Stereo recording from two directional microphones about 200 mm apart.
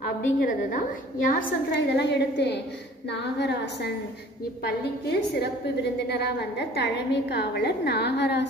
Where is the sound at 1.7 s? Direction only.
55° left (ahead or behind).